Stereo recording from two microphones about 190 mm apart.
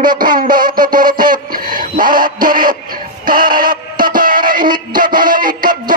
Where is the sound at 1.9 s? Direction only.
45° right (ahead or behind).